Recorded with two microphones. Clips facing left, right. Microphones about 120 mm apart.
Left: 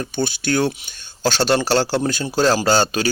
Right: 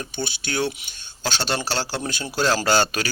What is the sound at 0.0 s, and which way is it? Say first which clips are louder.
A man's voice: left 7 dB; 45° left (ahead or behind).